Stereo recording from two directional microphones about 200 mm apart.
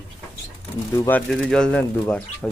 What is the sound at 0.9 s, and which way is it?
Speech, 15° left (ahead or behind).